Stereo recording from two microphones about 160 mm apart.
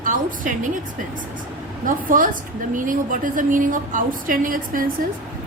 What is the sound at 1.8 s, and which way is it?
A woman's voice, 55° right (ahead or behind).